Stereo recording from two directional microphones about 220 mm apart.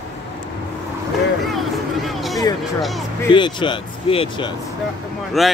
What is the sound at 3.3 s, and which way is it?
Speech, 20° left (ahead or behind).